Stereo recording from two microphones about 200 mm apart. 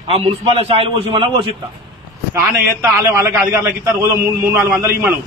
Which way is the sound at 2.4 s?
15° right (ahead or behind).